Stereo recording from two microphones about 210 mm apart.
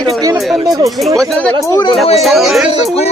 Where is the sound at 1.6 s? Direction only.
20° left (ahead or behind).